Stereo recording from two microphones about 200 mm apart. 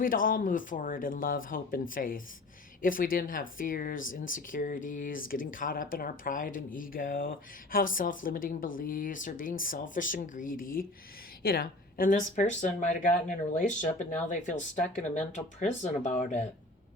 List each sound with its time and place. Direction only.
0.0 s speech: 45° left (ahead or behind)